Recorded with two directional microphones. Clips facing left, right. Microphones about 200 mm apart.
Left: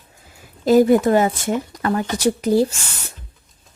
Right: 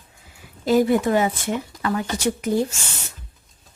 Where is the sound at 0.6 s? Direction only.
45° left (ahead or behind).